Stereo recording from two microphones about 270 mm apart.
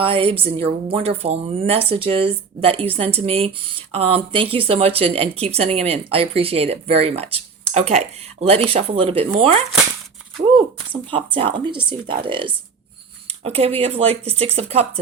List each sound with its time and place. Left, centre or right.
0.0 s speech: centre
11.1 s speech: centre